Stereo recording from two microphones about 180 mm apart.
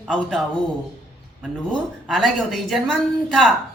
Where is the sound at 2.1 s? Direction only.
Centre (ahead or behind).